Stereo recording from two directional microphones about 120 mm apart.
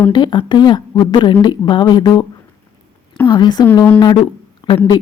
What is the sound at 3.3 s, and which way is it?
Speech, 35° left (ahead or behind).